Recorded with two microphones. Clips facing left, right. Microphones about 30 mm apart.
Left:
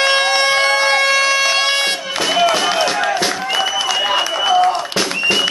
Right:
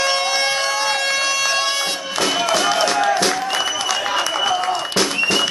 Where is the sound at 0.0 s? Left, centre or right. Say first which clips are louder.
Left 5 dB; left.